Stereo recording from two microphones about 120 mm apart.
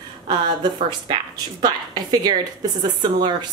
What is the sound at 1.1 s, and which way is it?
A woman's voice, 35° right (ahead or behind).